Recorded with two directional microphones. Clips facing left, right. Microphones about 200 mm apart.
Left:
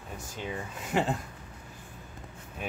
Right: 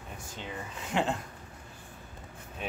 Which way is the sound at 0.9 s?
5° left (ahead or behind).